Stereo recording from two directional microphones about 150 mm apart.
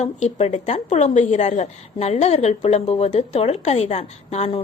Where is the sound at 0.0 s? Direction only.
45° left (ahead or behind).